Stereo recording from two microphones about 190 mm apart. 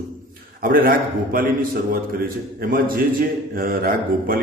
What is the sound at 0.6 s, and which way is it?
Speech, 50° right (ahead or behind).